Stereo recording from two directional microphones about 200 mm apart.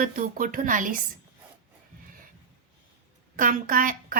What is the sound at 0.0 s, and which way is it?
Speech, 40° right (ahead or behind).